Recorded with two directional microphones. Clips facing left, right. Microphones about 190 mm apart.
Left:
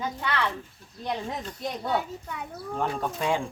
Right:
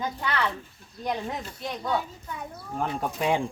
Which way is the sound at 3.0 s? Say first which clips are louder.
Right 4 dB; 15° right (ahead or behind).